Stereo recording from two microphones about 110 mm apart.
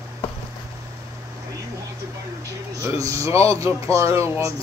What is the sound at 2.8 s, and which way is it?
Speech, 30° right (ahead or behind).